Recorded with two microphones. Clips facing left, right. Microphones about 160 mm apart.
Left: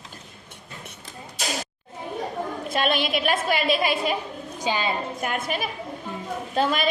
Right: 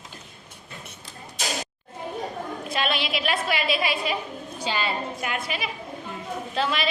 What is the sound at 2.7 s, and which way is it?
A woman's voice, 50° left (ahead or behind).